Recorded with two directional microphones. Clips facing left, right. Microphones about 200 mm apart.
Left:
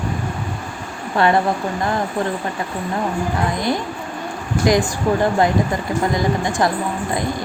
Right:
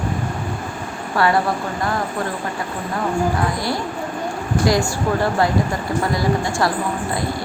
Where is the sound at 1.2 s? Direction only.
20° left (ahead or behind).